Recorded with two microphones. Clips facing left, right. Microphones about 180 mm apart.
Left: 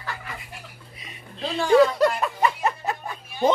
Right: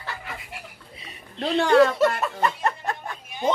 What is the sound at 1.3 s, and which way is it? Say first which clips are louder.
Speech: even; 65° right (ahead or behind).